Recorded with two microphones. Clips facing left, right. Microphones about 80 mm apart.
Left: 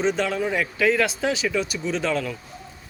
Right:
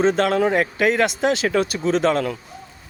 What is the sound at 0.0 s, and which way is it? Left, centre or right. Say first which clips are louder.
Speech: right 5 dB; right.